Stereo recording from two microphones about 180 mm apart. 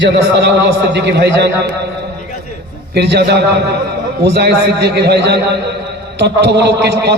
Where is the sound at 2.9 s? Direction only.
65° right (ahead or behind).